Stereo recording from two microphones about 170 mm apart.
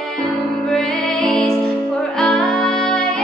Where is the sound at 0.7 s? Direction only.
Centre (ahead or behind).